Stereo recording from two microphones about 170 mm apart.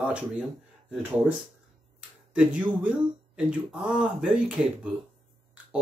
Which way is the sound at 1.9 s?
5° right (ahead or behind).